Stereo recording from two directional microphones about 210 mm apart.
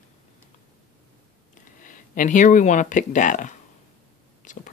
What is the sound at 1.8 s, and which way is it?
Speech, 40° left (ahead or behind).